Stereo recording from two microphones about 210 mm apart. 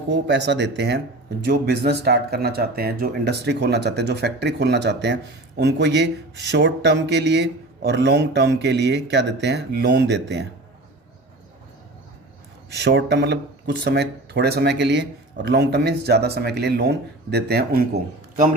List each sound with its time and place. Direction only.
0.1 s speech: 60° right (ahead or behind)
12.7 s speech: 55° right (ahead or behind)